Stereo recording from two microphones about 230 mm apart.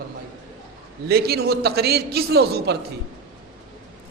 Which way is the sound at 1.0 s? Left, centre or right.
Right.